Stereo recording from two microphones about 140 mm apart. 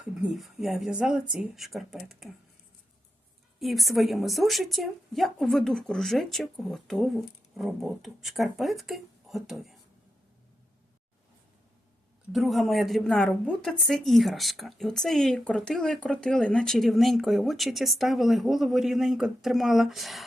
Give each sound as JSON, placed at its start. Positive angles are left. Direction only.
{"t": 0.0, "sound": "speech", "side_deg": -5}
{"t": 3.6, "sound": "speech", "side_deg": 0}
{"t": 12.3, "sound": "speech", "side_deg": 0}